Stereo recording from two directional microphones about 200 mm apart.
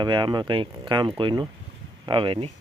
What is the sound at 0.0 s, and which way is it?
Speech, 20° right (ahead or behind).